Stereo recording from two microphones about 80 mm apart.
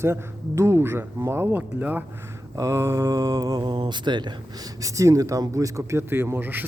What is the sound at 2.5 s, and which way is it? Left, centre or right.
A man's voice, right.